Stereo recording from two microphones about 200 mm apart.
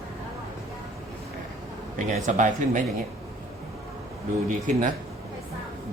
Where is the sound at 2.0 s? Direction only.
40° right (ahead or behind).